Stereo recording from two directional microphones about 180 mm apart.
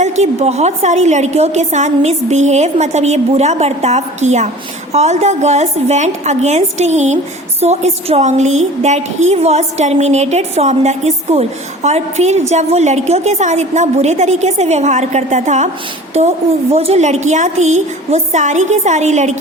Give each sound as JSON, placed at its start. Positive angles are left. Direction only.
{"t": 0.0, "sound": "a woman's voice", "side_deg": -40}
{"t": 16.7, "sound": "a woman's voice", "side_deg": -35}